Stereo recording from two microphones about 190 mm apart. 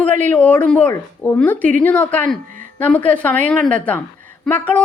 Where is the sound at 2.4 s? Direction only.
45° right (ahead or behind).